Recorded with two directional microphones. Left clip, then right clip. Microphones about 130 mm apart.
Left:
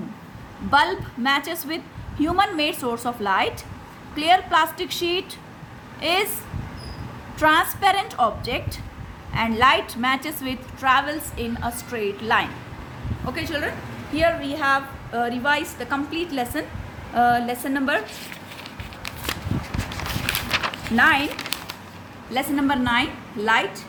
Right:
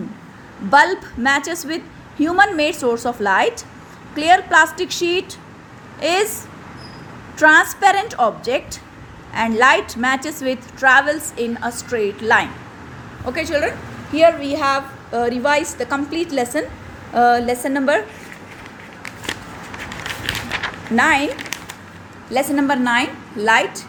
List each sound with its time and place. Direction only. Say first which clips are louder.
0.7 s a woman's voice: right 6 dB; 35° right (ahead or behind)
7.3 s a woman's voice: right 7 dB; 30° right (ahead or behind)
20.9 s a woman's voice: right 2 dB; 40° right (ahead or behind)
22.3 s a woman's voice: right 5 dB; 40° right (ahead or behind)